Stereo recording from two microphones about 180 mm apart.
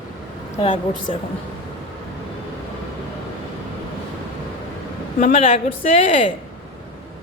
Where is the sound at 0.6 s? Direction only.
40° left (ahead or behind).